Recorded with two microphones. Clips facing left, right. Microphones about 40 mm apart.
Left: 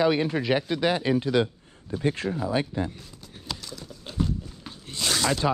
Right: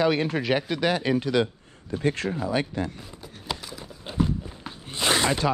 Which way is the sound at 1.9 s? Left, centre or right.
Right.